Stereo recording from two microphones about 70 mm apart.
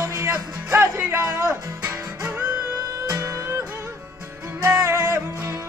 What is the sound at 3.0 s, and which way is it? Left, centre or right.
Music, right.